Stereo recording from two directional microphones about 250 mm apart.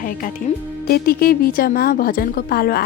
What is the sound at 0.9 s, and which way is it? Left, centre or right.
A woman's voice, left.